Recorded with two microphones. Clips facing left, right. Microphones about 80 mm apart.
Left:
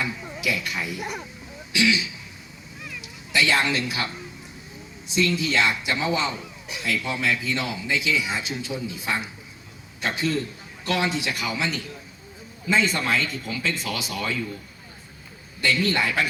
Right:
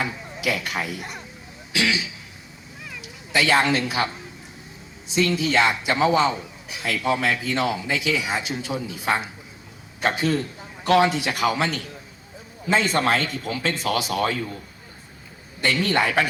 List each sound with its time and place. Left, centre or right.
0.0 s speech: right
3.3 s speech: right
5.1 s speech: right
12.6 s speech: right
15.6 s speech: right